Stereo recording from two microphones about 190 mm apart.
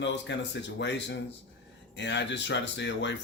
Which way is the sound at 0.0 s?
65° left (ahead or behind).